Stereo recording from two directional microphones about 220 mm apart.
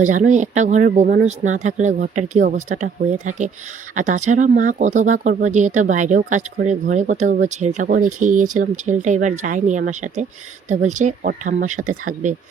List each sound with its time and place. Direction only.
0.1 s speech: 35° right (ahead or behind)